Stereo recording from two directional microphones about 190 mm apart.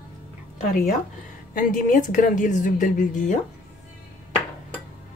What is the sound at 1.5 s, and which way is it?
Speech, 45° left (ahead or behind).